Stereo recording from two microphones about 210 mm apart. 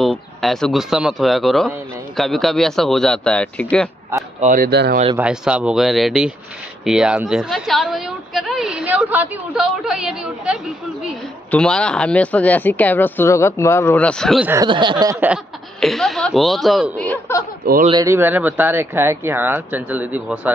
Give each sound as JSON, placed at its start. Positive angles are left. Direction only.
{"t": 0.0, "sound": "a woman's voice", "side_deg": 0}
{"t": 4.4, "sound": "speech", "side_deg": -40}
{"t": 5.1, "sound": "a woman's voice", "side_deg": -5}
{"t": 14.5, "sound": "speech", "side_deg": -20}
{"t": 15.1, "sound": "a woman's voice", "side_deg": -5}
{"t": 18.0, "sound": "speech", "side_deg": -10}